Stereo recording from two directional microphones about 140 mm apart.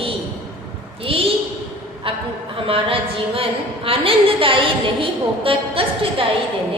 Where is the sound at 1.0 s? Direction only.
40° right (ahead or behind).